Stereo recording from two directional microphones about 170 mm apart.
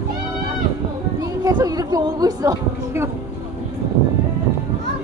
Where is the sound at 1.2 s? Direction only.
20° right (ahead or behind).